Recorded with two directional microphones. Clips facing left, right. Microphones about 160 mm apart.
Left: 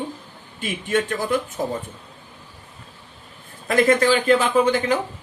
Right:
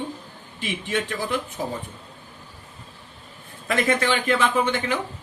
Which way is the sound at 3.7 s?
40° left (ahead or behind).